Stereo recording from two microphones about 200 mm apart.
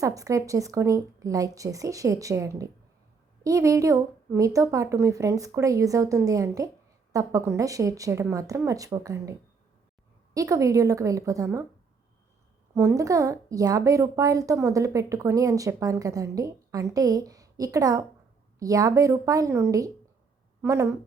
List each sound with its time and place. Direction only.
0.0 s a woman's voice: 15° right (ahead or behind)
12.7 s a woman's voice: 15° right (ahead or behind)